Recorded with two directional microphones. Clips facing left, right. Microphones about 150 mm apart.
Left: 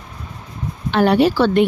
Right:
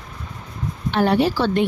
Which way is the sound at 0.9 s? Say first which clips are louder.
Left 4 dB; 85° left.